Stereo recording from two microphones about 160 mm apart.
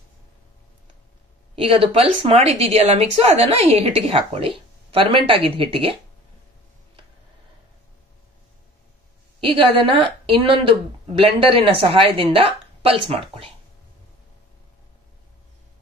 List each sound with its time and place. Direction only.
1.5 s a woman's voice: 35° right (ahead or behind)
9.4 s a woman's voice: 35° right (ahead or behind)